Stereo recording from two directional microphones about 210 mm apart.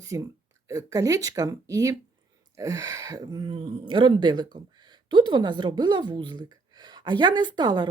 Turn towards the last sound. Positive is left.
turn(degrees=-20)  # may be behind; listen again after turning